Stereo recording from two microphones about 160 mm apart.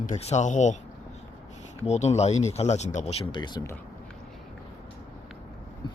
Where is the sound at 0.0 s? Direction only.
45° left (ahead or behind); by 3.6 s 30° left (ahead or behind).